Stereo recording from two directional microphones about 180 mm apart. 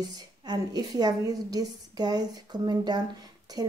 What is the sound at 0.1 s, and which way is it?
A woman's voice, 20° right (ahead or behind).